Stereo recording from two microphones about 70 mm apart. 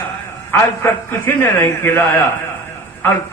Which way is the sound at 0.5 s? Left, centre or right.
Left.